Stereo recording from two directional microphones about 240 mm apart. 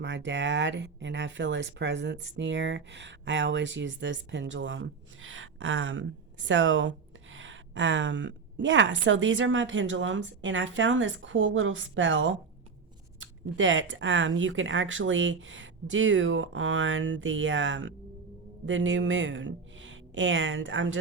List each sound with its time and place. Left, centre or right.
0.0 s speech: right